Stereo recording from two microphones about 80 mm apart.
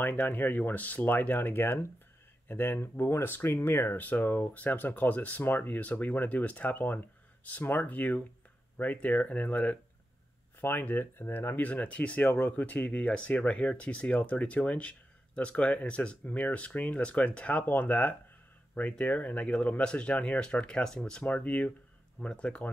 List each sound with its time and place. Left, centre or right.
0.0 s speech: left
21.2 s speech: centre